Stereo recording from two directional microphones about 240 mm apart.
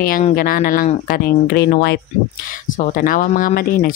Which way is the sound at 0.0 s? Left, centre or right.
Left.